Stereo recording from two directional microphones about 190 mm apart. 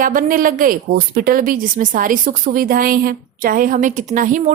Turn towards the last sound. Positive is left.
turn(degrees=-45)  # may be behind; listen again after turning